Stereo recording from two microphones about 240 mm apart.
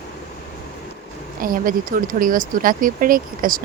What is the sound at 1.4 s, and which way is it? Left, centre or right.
Speech, right.